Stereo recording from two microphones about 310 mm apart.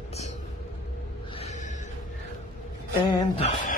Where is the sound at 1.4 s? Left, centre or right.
Left.